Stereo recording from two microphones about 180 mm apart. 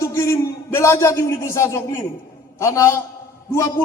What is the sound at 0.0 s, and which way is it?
A man's voice, 15° left (ahead or behind).